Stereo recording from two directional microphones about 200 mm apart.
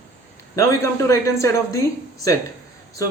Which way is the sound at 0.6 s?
15° left (ahead or behind).